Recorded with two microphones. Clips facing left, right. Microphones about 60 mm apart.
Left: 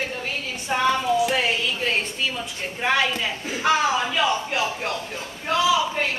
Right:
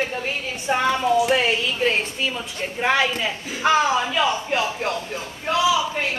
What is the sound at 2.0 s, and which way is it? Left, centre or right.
A woman's voice, centre.